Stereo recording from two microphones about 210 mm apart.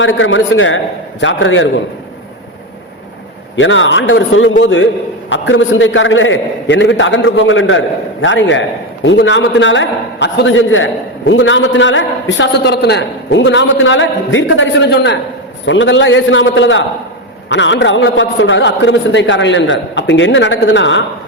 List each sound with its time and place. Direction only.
0.0 s a man's voice: 65° left (ahead or behind)
3.5 s a man's voice: 65° left (ahead or behind)